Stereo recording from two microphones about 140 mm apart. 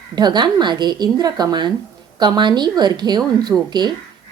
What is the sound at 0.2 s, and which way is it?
A woman's voice, 30° right (ahead or behind).